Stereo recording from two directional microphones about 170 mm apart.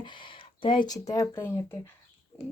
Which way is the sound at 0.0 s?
30° left (ahead or behind).